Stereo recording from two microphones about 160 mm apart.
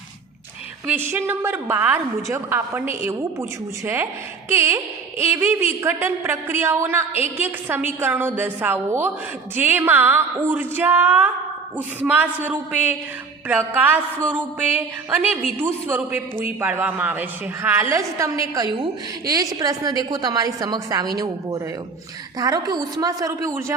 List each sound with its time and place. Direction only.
0.9 s a woman's voice: 10° right (ahead or behind)
4.4 s a woman's voice: 15° right (ahead or behind)